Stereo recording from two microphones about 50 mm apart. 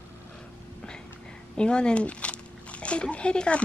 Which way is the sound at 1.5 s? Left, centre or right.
Centre.